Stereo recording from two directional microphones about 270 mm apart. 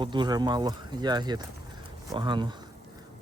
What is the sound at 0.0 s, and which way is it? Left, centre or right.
Speech, centre.